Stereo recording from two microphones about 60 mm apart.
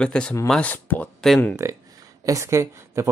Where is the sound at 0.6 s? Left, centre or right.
Left.